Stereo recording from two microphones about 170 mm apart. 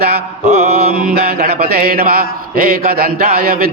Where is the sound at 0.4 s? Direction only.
40° right (ahead or behind).